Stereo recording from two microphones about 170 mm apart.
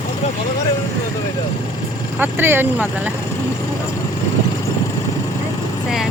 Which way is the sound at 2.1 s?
10° right (ahead or behind).